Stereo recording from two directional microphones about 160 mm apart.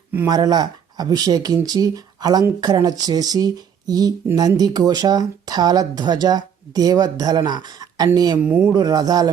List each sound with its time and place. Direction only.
0.3 s speech: 25° right (ahead or behind)
8.4 s speech: 10° right (ahead or behind)
8.7 s speech: 25° right (ahead or behind)